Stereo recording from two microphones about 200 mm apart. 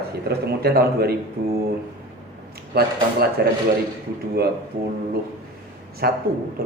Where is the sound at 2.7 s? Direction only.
50° right (ahead or behind).